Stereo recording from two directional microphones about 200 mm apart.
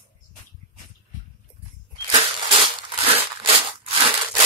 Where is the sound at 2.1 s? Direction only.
30° right (ahead or behind).